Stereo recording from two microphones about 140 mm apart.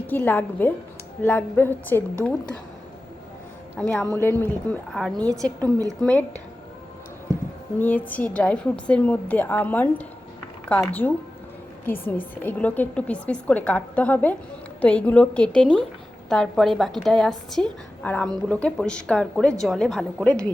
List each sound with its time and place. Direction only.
0.1 s a woman's voice: 10° left (ahead or behind)
3.8 s a woman's voice: 5° left (ahead or behind)
4.1 s a woman's voice: 15° left (ahead or behind)
4.9 s a woman's voice: centre (ahead or behind)
7.8 s a woman's voice: 10° left (ahead or behind)